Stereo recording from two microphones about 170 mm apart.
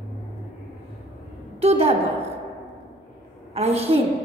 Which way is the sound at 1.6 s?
35° right (ahead or behind).